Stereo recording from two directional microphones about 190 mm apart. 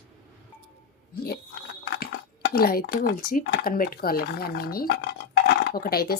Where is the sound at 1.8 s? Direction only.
60° left (ahead or behind).